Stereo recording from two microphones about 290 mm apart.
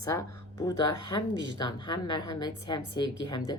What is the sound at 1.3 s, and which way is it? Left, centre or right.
Speech, right.